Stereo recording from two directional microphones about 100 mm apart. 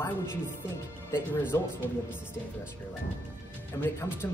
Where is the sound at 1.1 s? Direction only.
20° left (ahead or behind).